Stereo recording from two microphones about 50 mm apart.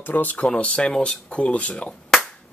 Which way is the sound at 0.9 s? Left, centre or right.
Centre.